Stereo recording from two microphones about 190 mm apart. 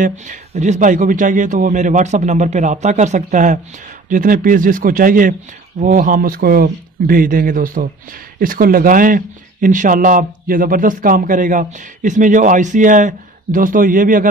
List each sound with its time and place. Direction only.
0.0 s a man's voice: 40° right (ahead or behind)